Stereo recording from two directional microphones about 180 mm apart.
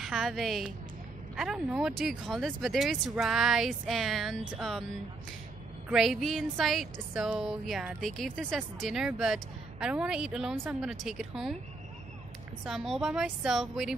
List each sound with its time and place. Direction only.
0.0 s speech: centre (ahead or behind)
5.9 s speech: centre (ahead or behind)
12.6 s speech: 5° right (ahead or behind)